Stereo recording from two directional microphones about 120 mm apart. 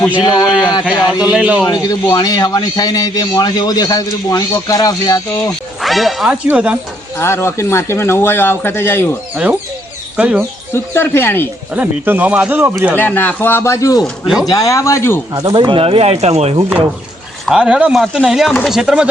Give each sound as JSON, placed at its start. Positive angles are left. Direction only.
{"t": 0.1, "sound": "a man's voice", "side_deg": 40}
{"t": 1.2, "sound": "speech", "side_deg": -5}
{"t": 1.6, "sound": "a man's voice", "side_deg": 35}
{"t": 5.8, "sound": "whip", "side_deg": 0}
{"t": 6.5, "sound": "speech", "side_deg": -10}
{"t": 7.2, "sound": "speech", "side_deg": 20}
{"t": 9.3, "sound": "speech", "side_deg": -10}
{"t": 10.7, "sound": "speech", "side_deg": 20}
{"t": 11.7, "sound": "speech", "side_deg": -15}
{"t": 13.0, "sound": "speech", "side_deg": 15}
{"t": 15.3, "sound": "speech", "side_deg": -35}
{"t": 17.4, "sound": "speech", "side_deg": -5}